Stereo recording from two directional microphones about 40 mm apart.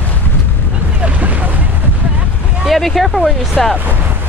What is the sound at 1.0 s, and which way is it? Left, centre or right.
Speech, right.